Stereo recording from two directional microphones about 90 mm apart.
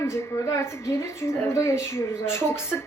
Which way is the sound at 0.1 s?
30° left (ahead or behind).